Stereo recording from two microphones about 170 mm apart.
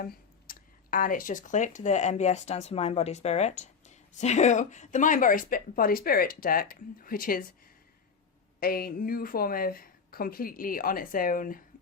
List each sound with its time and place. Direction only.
0.0 s speech: 60° left (ahead or behind)
8.6 s speech: 60° left (ahead or behind)